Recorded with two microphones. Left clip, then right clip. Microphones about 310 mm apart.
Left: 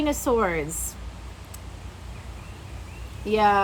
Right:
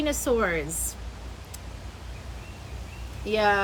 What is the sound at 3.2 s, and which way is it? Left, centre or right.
Speech, centre.